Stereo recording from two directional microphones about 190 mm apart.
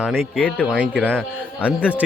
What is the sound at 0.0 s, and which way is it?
Speech, 5° left (ahead or behind).